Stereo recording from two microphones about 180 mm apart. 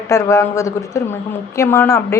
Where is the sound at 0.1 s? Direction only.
15° left (ahead or behind).